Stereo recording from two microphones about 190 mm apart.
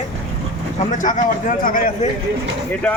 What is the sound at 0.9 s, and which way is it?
A man's voice, 45° left (ahead or behind).